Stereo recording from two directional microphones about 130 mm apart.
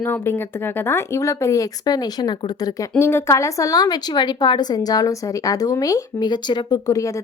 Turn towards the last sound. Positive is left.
turn(degrees=30)  # may be behind; listen again after turning